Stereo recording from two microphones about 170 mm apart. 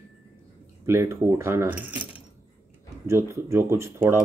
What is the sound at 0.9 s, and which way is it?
Speech, 15° right (ahead or behind).